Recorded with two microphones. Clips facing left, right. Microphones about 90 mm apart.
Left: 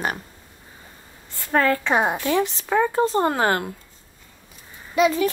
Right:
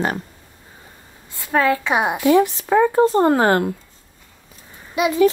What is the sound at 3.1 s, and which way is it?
Speech, 35° right (ahead or behind).